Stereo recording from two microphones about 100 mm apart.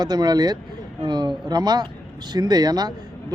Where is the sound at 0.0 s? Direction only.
45° right (ahead or behind).